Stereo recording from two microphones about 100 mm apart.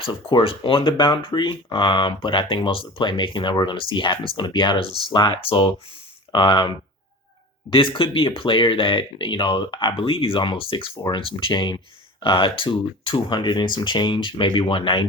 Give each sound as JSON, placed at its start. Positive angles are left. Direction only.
{"t": 0.0, "sound": "speech", "side_deg": 50}
{"t": 5.4, "sound": "speech", "side_deg": 65}